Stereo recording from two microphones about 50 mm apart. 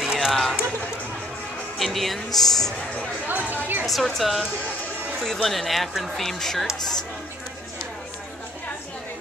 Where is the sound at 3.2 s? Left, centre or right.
Right.